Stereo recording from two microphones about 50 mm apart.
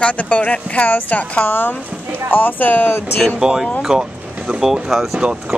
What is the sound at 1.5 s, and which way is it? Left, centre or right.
Speech, left.